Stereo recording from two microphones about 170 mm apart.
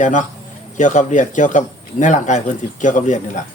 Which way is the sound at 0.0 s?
45° left (ahead or behind).